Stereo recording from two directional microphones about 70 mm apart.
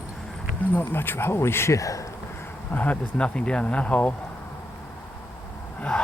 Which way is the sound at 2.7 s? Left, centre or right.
Left.